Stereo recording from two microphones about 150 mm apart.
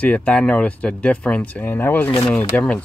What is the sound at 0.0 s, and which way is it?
Speech, 10° left (ahead or behind).